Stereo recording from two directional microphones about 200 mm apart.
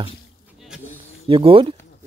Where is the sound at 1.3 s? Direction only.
25° right (ahead or behind).